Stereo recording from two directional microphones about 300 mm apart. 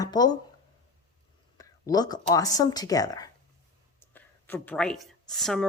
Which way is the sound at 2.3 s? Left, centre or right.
Centre.